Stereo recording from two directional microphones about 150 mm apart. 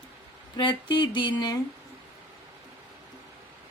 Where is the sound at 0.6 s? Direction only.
30° left (ahead or behind).